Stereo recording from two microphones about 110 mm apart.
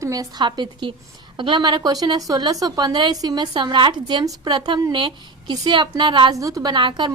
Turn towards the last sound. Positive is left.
turn(degrees=-45)  # may be behind; listen again after turning